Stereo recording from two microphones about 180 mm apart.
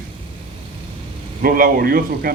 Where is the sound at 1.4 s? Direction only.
55° right (ahead or behind).